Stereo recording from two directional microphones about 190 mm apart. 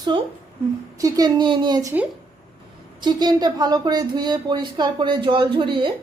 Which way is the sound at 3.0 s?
20° right (ahead or behind).